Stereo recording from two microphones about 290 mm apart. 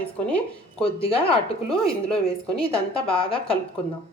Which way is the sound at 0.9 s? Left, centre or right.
Centre.